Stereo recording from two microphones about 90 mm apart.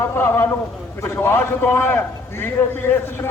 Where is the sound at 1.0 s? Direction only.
25° left (ahead or behind).